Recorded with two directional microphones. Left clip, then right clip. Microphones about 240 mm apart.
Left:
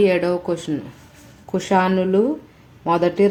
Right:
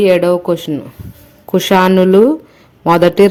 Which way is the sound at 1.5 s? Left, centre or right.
Right.